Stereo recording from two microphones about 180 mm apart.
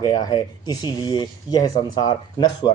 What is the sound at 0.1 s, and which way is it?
Speech, 25° left (ahead or behind).